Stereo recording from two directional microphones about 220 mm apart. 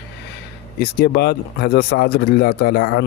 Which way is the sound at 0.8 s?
45° left (ahead or behind).